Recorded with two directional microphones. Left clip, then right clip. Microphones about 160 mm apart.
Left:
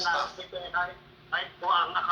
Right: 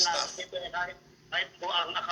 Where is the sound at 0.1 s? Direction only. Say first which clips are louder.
Left 2 dB; 30° right (ahead or behind).